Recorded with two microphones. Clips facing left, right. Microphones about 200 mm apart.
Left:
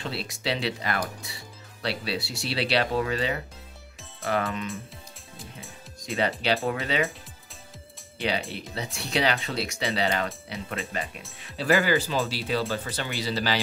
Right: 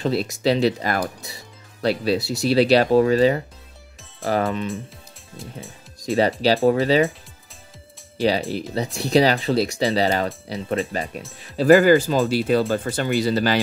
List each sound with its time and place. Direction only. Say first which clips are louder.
0.0 s speech: right 11 dB; 45° right (ahead or behind)
6.0 s speech: right 8 dB; 35° right (ahead or behind)
8.2 s speech: right 8 dB; 35° right (ahead or behind)